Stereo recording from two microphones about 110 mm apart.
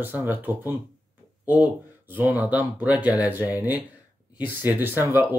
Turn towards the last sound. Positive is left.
turn(degrees=-20)  # may be behind; listen again after turning